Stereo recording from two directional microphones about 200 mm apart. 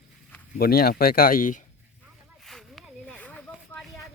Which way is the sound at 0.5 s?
50° left (ahead or behind).